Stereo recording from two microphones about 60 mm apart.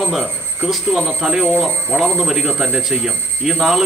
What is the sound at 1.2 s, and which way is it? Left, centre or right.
Speech, centre.